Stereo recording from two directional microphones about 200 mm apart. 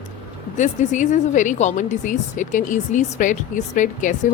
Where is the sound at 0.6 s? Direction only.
40° left (ahead or behind).